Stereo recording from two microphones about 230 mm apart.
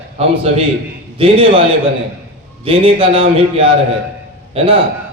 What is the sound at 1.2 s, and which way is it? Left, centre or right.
Speech, right.